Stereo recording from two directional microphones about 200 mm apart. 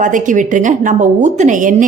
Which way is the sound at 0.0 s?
40° right (ahead or behind).